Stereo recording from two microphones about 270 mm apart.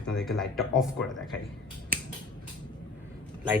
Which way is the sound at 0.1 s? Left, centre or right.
Centre.